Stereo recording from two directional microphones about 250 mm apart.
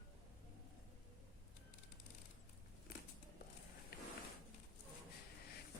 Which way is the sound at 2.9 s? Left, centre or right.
Left.